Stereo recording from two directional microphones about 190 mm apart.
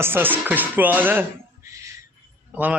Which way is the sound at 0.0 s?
10° right (ahead or behind).